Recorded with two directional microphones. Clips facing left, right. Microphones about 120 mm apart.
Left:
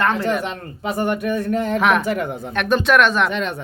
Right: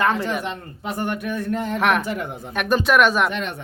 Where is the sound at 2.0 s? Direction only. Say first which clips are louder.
Left 5 dB; 90° left.